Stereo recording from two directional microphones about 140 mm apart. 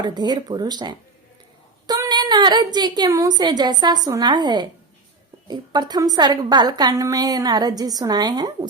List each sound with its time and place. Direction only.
0.0 s a woman's voice: 30° right (ahead or behind)